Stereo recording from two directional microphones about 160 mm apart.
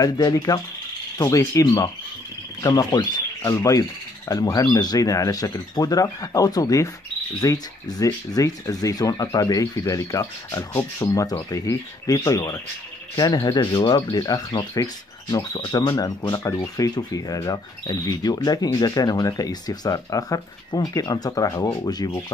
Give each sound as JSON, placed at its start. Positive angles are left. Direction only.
{"t": 0.0, "sound": "speech", "side_deg": 25}